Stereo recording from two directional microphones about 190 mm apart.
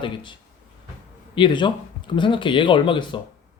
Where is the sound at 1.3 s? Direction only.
25° left (ahead or behind).